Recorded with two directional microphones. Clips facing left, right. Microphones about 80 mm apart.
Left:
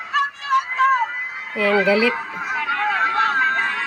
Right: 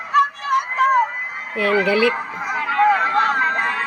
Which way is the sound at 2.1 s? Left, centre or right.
Centre.